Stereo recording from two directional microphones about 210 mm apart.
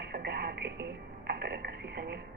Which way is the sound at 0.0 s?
50° right (ahead or behind).